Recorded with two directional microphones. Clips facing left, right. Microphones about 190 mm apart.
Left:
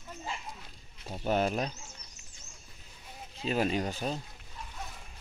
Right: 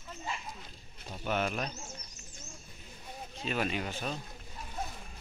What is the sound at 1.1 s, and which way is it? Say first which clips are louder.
Speech: left 4 dB; 35° left (ahead or behind).